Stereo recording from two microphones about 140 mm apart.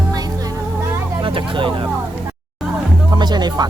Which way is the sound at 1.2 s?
40° right (ahead or behind).